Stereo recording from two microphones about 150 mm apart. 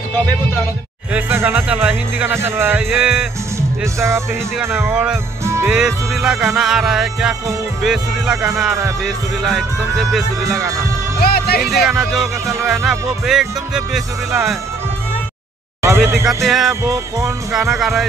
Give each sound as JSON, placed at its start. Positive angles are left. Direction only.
{"t": 1.1, "sound": "speech", "side_deg": -10}
{"t": 2.8, "sound": "speech", "side_deg": -5}
{"t": 3.5, "sound": "music", "side_deg": -20}
{"t": 4.6, "sound": "speech", "side_deg": -10}
{"t": 5.4, "sound": "music", "side_deg": -20}
{"t": 5.7, "sound": "speech", "side_deg": -5}
{"t": 11.1, "sound": "speech", "side_deg": 90}
{"t": 11.7, "sound": "speech", "side_deg": 0}
{"t": 15.8, "sound": "speech", "side_deg": -15}
{"t": 16.4, "sound": "speech", "side_deg": 0}
{"t": 16.8, "sound": "music", "side_deg": -20}
{"t": 17.6, "sound": "speech", "side_deg": 0}